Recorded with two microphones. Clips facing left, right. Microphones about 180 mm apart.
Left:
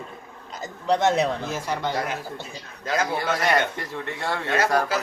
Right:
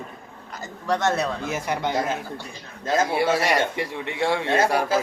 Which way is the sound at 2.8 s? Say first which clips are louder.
Right 3 dB; 25° right (ahead or behind).